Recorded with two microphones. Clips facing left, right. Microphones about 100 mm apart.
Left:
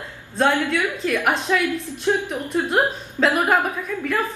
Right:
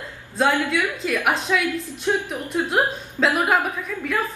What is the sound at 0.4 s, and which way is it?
A woman's voice, centre (ahead or behind).